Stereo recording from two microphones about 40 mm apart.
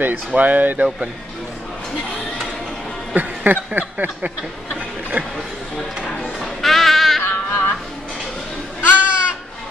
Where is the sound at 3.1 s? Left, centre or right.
Right.